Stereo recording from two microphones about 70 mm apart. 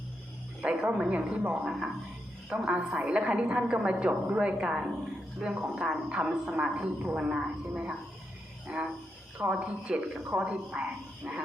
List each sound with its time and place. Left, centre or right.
0.6 s a woman's voice: centre